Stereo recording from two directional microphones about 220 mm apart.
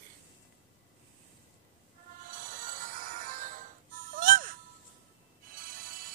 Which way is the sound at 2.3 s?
35° right (ahead or behind).